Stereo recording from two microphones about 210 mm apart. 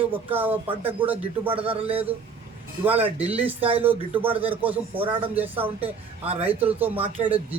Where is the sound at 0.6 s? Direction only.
25° right (ahead or behind).